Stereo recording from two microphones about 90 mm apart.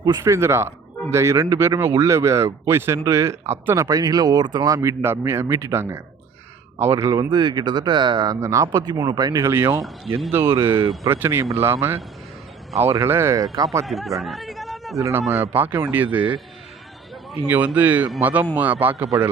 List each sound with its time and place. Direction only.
0.0 s speech: 45° right (ahead or behind)
0.3 s a man's voice: 30° right (ahead or behind)
3.8 s speech: 45° right (ahead or behind)
4.8 s a man's voice: 30° right (ahead or behind)
7.3 s speech: 55° right (ahead or behind)
8.3 s a man's voice: 35° right (ahead or behind)
8.8 s speech: 50° right (ahead or behind)
9.4 s a man's voice: 30° right (ahead or behind)
13.8 s chatter: centre (ahead or behind)
14.9 s a man's voice: 35° right (ahead or behind)
15.3 s speech: 25° right (ahead or behind)
17.5 s speech: 20° right (ahead or behind)